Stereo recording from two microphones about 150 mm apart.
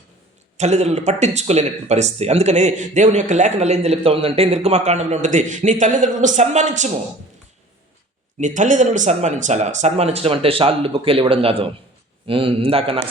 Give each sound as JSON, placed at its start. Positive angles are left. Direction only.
{"t": 0.5, "sound": "speech", "side_deg": -50}
{"t": 8.4, "sound": "speech", "side_deg": -55}